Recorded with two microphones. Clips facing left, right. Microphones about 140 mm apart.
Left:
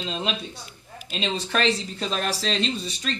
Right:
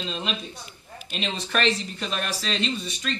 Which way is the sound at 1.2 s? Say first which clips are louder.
Left 1 dB; 35° left (ahead or behind).